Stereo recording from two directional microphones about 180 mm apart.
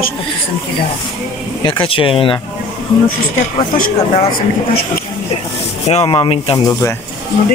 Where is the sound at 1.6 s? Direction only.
30° left (ahead or behind).